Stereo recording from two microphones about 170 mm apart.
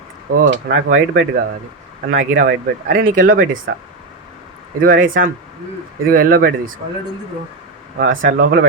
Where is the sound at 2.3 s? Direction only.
55° right (ahead or behind).